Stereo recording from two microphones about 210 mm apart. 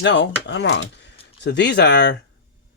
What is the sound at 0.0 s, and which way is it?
Speech, 60° left (ahead or behind).